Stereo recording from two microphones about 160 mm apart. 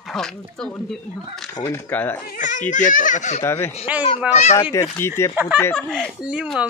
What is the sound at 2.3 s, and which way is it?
A child's voice, 50° left (ahead or behind).